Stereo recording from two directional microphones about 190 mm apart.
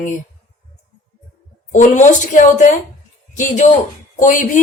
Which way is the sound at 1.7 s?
40° left (ahead or behind).